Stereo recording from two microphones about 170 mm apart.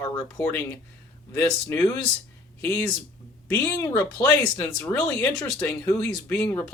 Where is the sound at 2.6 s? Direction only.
10° left (ahead or behind).